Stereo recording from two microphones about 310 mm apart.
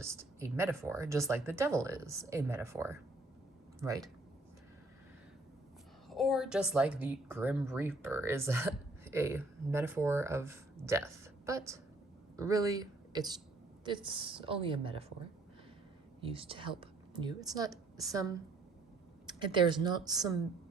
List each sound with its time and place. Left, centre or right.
0.0 s a woman's voice: centre
6.1 s a woman's voice: centre
16.2 s a woman's voice: centre